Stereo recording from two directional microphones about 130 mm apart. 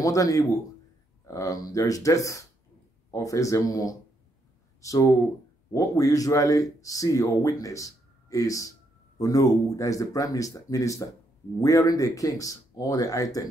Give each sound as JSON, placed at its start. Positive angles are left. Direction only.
{"t": 0.0, "sound": "speech", "side_deg": 25}